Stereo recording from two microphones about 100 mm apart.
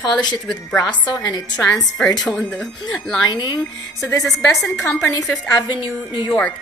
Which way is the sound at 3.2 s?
45° left (ahead or behind).